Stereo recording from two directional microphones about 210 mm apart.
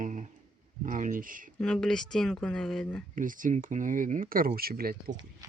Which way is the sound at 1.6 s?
5° left (ahead or behind).